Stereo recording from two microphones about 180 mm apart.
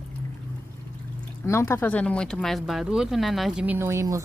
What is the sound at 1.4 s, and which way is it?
Speech, 15° left (ahead or behind).